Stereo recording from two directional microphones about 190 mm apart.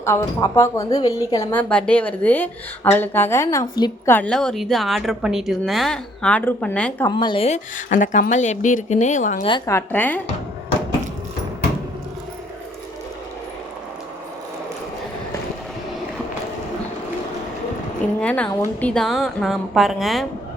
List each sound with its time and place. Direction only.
0.0 s a woman's voice: 15° left (ahead or behind)
4.1 s a woman's voice: 5° left (ahead or behind)
7.1 s a woman's voice: 25° left (ahead or behind); by 9.5 s 40° left (ahead or behind)
9.5 s a woman's voice: 15° left (ahead or behind)
18.2 s a woman's voice: 5° left (ahead or behind)